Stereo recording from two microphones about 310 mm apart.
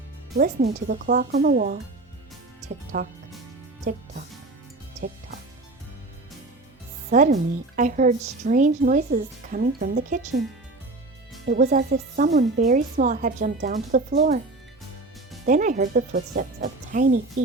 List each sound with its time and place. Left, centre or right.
0.3 s a woman's voice: right
2.9 s a woman's voice: right
7.1 s a woman's voice: right
11.4 s a woman's voice: right
15.4 s a woman's voice: right